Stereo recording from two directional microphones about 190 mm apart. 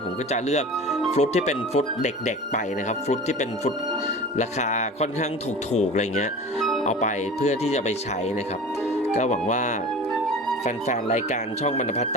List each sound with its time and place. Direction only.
0.3 s speech: 35° left (ahead or behind)
9.1 s speech: 35° left (ahead or behind)
10.8 s speech: 40° left (ahead or behind)